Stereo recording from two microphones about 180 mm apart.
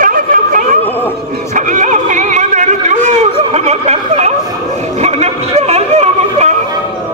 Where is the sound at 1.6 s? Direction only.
45° right (ahead or behind).